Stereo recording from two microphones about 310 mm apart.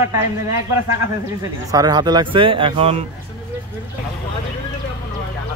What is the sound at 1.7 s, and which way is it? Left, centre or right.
Speech, centre.